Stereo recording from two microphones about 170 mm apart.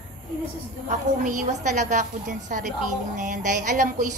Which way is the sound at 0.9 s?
45° right (ahead or behind).